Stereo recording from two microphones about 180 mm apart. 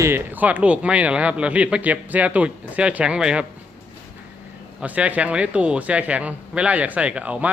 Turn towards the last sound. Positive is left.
turn(degrees=-5)  # may be behind; listen again after turning